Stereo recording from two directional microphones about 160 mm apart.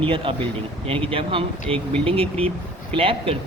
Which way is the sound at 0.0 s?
35° right (ahead or behind).